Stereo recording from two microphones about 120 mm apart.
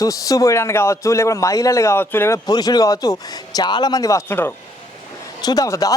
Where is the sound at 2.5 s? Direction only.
35° left (ahead or behind).